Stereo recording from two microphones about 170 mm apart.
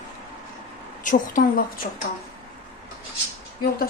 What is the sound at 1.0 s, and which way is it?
Speech, 50° left (ahead or behind).